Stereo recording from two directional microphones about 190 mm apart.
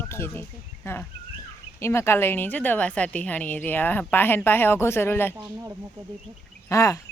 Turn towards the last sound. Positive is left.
turn(degrees=15)  # may be behind; listen again after turning